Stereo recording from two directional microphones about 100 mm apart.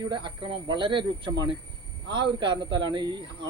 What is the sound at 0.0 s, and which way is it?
A man's voice, 50° right (ahead or behind).